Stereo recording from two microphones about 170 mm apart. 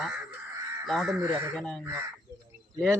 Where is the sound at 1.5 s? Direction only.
Centre (ahead or behind).